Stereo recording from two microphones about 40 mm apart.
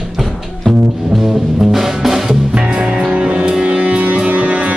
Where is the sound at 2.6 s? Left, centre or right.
Right.